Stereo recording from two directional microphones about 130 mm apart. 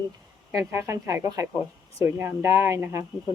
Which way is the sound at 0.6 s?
20° right (ahead or behind).